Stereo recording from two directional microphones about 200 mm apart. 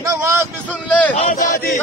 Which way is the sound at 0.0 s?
15° right (ahead or behind).